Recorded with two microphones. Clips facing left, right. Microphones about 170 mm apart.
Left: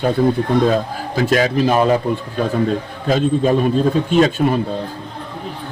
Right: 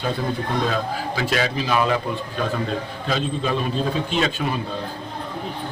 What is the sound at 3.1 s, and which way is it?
A man's voice, 45° left (ahead or behind).